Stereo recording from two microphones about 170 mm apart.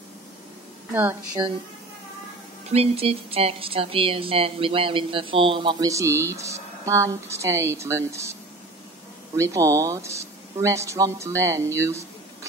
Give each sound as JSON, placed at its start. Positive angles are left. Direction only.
{"t": 2.7, "sound": "speech", "side_deg": -35}
{"t": 9.4, "sound": "speech", "side_deg": -20}